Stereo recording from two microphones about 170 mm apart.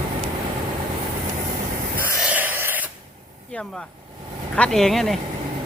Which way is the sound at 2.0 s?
10° right (ahead or behind).